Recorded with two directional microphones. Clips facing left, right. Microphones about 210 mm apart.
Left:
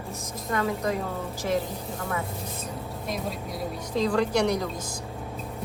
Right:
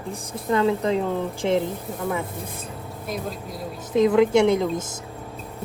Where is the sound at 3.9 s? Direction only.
20° right (ahead or behind).